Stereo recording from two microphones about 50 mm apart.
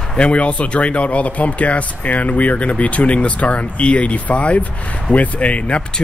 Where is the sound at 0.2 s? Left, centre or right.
Left.